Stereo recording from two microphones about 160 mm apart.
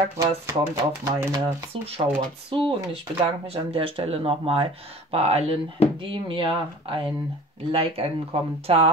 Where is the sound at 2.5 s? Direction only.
30° right (ahead or behind).